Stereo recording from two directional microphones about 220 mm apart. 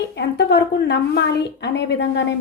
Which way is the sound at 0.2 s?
50° left (ahead or behind).